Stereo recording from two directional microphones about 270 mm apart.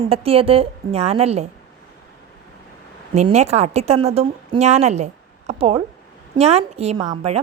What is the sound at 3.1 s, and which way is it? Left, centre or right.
A woman's voice, right.